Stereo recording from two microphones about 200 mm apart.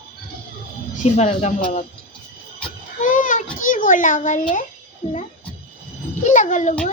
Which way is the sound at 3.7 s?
40° left (ahead or behind).